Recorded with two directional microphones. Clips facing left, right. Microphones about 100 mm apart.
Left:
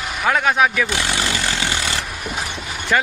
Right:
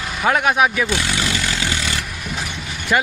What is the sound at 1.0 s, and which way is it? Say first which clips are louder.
Vehicle: even; 30° left (ahead or behind).